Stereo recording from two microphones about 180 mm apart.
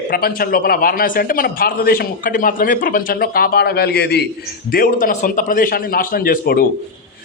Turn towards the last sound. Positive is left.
turn(degrees=55)  # may be behind; listen again after turning